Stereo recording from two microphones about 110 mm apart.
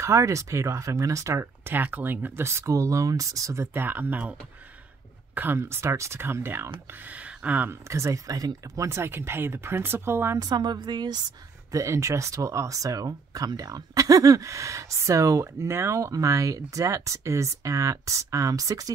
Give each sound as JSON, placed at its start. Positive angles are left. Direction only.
{"t": 0.0, "sound": "speech", "side_deg": -30}
{"t": 10.4, "sound": "speech", "side_deg": -40}
{"t": 11.7, "sound": "speech", "side_deg": -25}